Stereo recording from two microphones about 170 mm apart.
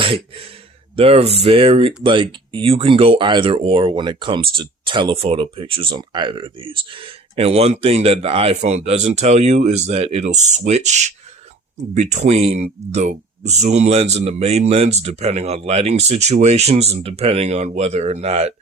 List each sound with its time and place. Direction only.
0.9 s speech: 35° right (ahead or behind)